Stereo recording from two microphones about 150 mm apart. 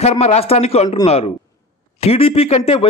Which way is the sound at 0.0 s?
45° left (ahead or behind).